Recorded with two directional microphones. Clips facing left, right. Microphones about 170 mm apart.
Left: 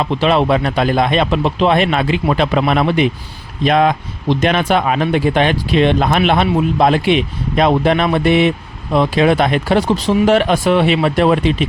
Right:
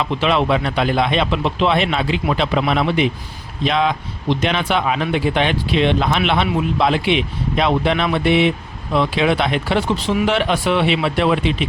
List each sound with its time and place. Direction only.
0.0 s speech: 40° left (ahead or behind)